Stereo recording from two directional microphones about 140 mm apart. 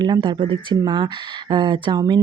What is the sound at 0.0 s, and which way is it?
Speech, 35° right (ahead or behind).